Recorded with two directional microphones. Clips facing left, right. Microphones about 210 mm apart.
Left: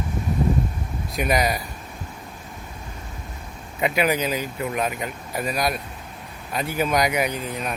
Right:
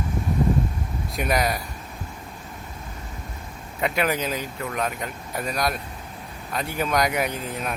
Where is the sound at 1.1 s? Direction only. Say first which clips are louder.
Left 2 dB; centre (ahead or behind).